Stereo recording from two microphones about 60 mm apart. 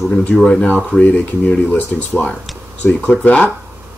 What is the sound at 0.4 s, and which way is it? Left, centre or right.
Speech, centre.